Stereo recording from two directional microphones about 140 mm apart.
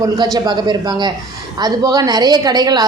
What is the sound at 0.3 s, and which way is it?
A woman's voice, 30° right (ahead or behind).